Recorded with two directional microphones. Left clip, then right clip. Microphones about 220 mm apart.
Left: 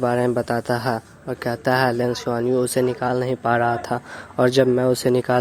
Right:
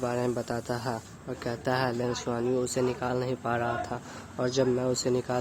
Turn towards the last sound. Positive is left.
turn(degrees=35)  # may be behind; listen again after turning